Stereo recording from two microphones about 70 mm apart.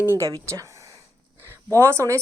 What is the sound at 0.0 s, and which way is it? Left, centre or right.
Speech, right.